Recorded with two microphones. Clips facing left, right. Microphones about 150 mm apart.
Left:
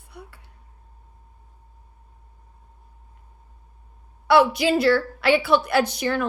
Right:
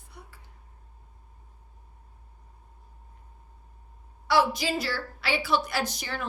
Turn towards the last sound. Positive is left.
turn(degrees=65)  # may be behind; listen again after turning